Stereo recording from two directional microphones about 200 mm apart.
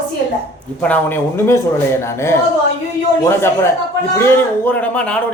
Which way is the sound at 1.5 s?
15° left (ahead or behind).